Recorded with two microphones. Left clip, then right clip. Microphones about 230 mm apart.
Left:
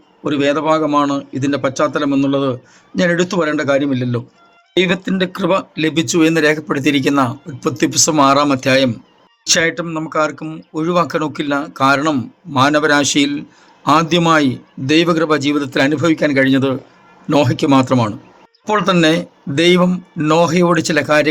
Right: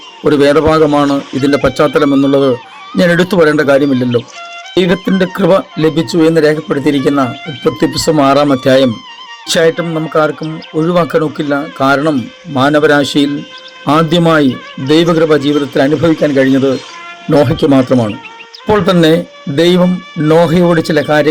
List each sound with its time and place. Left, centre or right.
0.3 s a man's voice: right